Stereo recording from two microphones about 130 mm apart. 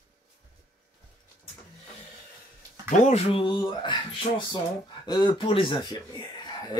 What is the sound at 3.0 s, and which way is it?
Speech, 55° left (ahead or behind).